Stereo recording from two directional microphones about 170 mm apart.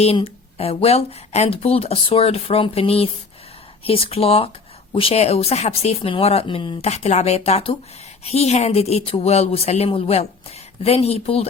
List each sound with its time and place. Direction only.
0.0 s speech: 35° left (ahead or behind)